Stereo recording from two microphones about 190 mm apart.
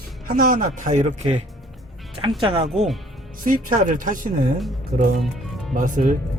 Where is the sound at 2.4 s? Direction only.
25° right (ahead or behind).